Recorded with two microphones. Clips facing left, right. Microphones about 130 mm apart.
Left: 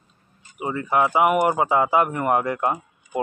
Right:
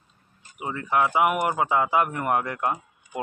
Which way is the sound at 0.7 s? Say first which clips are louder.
Left 3 dB; 10° left (ahead or behind).